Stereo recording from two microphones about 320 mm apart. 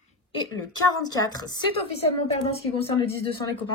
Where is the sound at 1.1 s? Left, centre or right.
Centre.